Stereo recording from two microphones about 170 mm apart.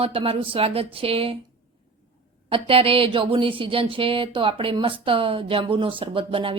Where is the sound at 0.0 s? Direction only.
35° right (ahead or behind).